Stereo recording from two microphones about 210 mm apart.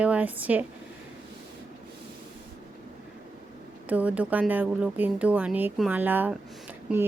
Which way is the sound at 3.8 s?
5° right (ahead or behind).